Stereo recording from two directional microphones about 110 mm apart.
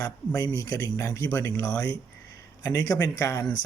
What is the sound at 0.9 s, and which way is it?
Speech, 25° left (ahead or behind).